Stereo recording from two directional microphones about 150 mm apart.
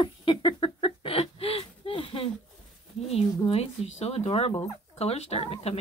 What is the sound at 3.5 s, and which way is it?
Speech, 45° left (ahead or behind).